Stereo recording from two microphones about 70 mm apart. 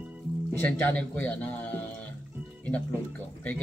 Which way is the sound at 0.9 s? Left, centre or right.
Centre.